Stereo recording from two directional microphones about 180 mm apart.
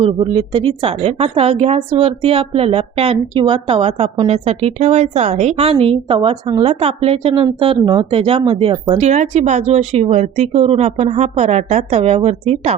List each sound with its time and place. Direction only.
0.0 s a woman's voice: 30° right (ahead or behind)